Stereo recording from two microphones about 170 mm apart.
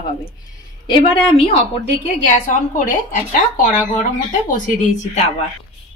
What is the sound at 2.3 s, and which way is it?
A woman's voice, 50° left (ahead or behind).